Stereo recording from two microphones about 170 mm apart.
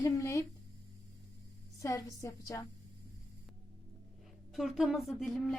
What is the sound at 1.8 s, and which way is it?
Speech, 20° left (ahead or behind).